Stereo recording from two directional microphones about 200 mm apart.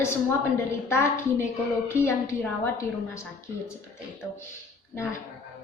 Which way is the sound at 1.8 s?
10° left (ahead or behind).